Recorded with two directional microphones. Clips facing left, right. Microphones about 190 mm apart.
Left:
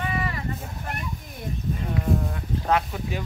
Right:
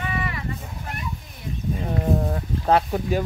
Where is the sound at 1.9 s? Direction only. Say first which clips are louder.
Right 3 dB; 35° right (ahead or behind).